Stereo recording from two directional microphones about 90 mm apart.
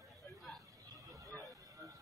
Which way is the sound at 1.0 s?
35° right (ahead or behind).